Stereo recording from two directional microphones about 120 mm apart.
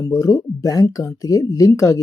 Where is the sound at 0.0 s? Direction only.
30° left (ahead or behind).